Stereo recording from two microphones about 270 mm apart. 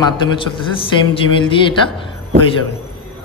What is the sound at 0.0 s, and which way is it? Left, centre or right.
A man's voice, centre.